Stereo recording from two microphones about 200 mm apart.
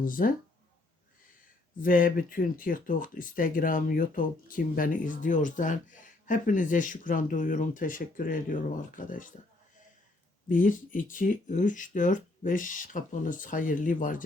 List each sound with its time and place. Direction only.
0.0 s speech: 45° left (ahead or behind)
1.8 s speech: 45° left (ahead or behind)
10.5 s speech: 40° left (ahead or behind)